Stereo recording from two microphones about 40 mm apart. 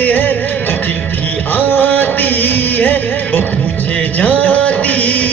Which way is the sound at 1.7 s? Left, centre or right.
Left.